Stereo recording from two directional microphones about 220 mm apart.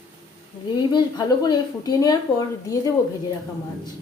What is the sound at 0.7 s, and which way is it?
Speech, 20° left (ahead or behind).